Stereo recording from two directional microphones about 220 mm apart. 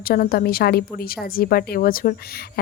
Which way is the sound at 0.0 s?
45° left (ahead or behind).